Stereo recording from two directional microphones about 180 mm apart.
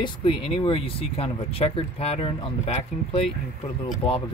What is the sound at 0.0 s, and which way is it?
Speech, 30° left (ahead or behind).